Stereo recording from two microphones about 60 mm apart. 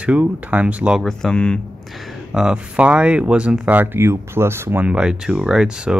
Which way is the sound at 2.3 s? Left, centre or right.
Centre.